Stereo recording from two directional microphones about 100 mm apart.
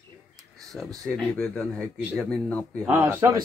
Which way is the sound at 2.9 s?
25° right (ahead or behind).